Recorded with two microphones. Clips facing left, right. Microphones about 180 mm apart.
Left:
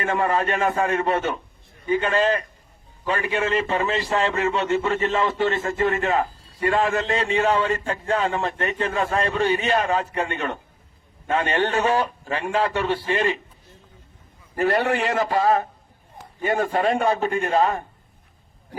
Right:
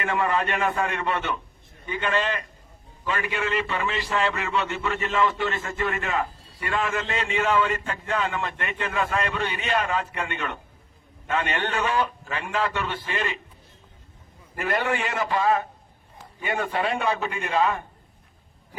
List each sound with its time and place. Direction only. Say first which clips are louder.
0.0 s speech: left 3 dB; 35° left (ahead or behind)
14.5 s a man's voice: left 5 dB; 40° left (ahead or behind)